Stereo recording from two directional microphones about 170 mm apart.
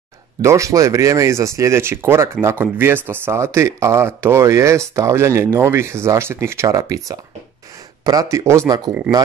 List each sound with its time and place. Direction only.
0.4 s speech: 15° right (ahead or behind)